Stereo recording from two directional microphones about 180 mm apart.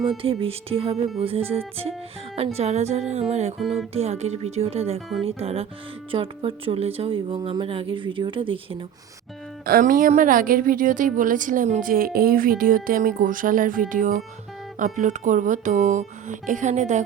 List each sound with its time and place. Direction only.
0.2 s speech: 30° right (ahead or behind)
3.6 s speech: centre (ahead or behind)
3.9 s speech: 35° right (ahead or behind)
4.9 s speech: centre (ahead or behind)
5.4 s speech: 35° right (ahead or behind)
9.6 s a woman's voice: 50° right (ahead or behind)